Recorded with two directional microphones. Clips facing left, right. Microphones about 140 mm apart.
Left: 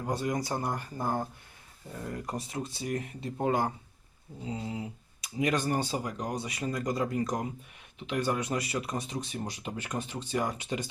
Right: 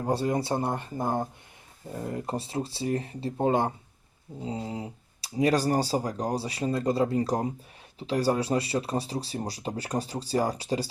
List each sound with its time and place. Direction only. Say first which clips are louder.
0.0 s speech: right 5 dB; 30° right (ahead or behind)